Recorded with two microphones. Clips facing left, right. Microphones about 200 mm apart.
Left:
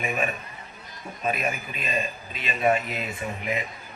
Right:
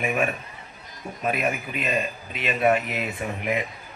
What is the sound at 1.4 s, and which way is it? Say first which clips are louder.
Speech: right 4 dB; 60° right (ahead or behind).